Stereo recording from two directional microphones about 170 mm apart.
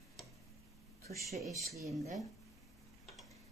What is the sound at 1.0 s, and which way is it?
Speech, 20° left (ahead or behind).